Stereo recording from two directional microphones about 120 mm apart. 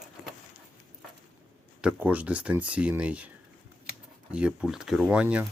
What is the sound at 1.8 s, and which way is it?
Speech, 10° right (ahead or behind).